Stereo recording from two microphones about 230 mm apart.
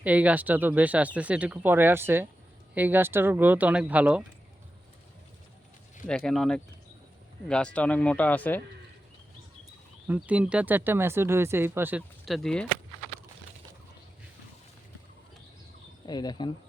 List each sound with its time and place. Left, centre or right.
0.0 s speech: centre
6.1 s speech: centre
10.1 s speech: centre
16.0 s speech: centre